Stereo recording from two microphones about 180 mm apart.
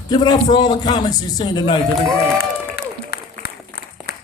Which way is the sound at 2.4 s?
60° left (ahead or behind).